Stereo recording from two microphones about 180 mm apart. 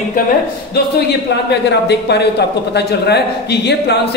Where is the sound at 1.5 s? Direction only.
70° left (ahead or behind).